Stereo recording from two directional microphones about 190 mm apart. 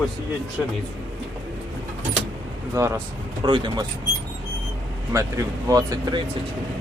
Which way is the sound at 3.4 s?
25° right (ahead or behind).